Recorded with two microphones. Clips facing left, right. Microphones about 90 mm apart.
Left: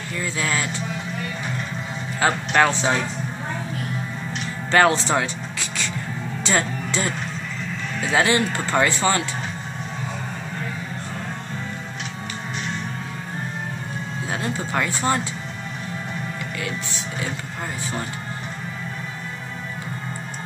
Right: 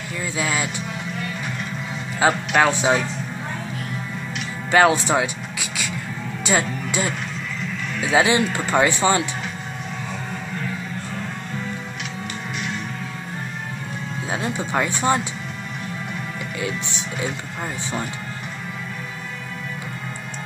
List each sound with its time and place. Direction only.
0.2 s speech: 15° right (ahead or behind)
2.1 s speech: 10° right (ahead or behind)
4.6 s speech: 10° right (ahead or behind)
14.3 s speech: 20° right (ahead or behind)
16.6 s speech: 20° right (ahead or behind)